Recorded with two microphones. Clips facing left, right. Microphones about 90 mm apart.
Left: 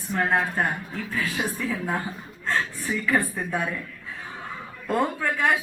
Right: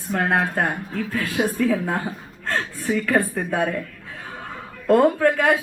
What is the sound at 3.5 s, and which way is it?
A woman's voice, 65° right (ahead or behind).